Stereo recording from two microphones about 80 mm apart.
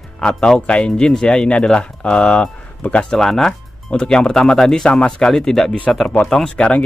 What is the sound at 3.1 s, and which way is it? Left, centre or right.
Speech, centre.